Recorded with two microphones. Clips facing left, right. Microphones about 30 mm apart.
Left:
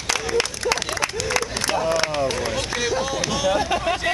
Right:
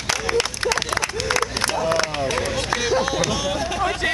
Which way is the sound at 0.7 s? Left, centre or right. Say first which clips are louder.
Right 1 dB; centre.